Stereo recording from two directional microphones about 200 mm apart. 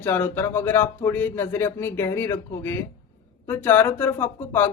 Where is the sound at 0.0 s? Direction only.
10° left (ahead or behind).